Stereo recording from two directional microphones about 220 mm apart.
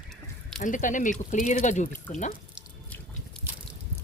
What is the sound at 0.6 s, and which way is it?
Speech, 35° left (ahead or behind).